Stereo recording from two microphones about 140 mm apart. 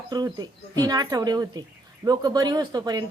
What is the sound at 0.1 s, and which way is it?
A woman's voice, 30° right (ahead or behind).